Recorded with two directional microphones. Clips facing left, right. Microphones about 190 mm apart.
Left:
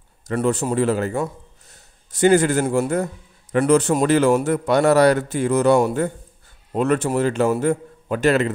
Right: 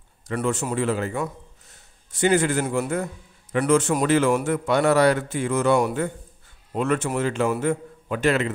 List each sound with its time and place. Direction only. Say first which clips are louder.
0.4 s a man's voice: left 5 dB; 35° left (ahead or behind)